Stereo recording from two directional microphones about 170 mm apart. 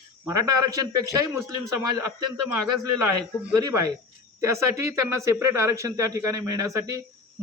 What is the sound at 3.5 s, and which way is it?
Speech, 20° right (ahead or behind).